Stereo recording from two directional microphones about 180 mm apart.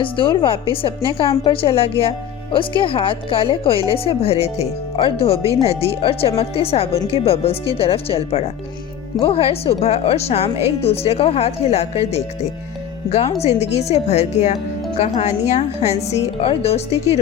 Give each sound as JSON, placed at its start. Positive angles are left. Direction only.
{"t": 0.0, "sound": "a woman's voice", "side_deg": 30}